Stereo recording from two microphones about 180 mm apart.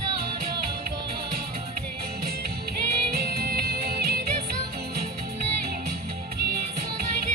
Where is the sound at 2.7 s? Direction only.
60° right (ahead or behind).